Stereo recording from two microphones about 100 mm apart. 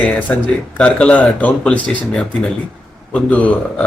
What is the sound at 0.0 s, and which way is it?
Speech, 15° left (ahead or behind).